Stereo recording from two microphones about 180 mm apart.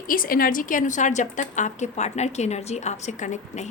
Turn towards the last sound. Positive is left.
turn(degrees=40)  # may be behind; listen again after turning